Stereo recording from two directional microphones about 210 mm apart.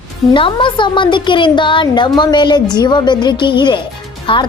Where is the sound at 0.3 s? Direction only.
25° left (ahead or behind).